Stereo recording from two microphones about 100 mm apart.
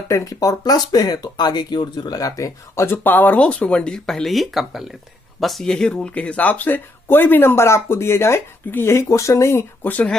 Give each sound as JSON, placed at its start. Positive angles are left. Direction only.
{"t": 0.1, "sound": "speech", "side_deg": 35}